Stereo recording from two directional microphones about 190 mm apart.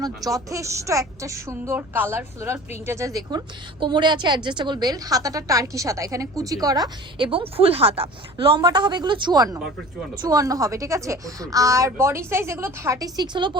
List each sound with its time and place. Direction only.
0.0 s a woman's voice: 20° right (ahead or behind)